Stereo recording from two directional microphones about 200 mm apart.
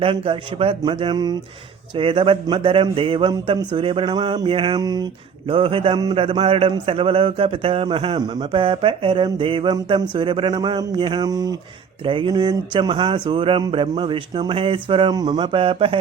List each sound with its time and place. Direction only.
0.0 s speech: 25° right (ahead or behind)